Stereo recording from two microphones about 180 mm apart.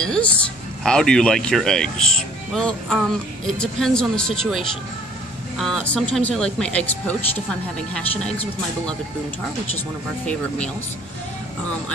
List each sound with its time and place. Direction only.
0.0 s speech: 5° left (ahead or behind)